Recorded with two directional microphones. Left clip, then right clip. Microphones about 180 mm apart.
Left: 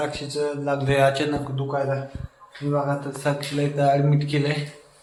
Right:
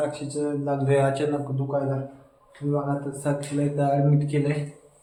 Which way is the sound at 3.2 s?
15° left (ahead or behind).